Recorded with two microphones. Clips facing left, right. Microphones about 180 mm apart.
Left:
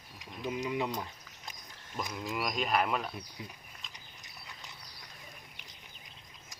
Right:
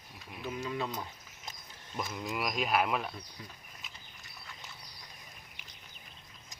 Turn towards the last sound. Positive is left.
turn(degrees=20)  # may be behind; listen again after turning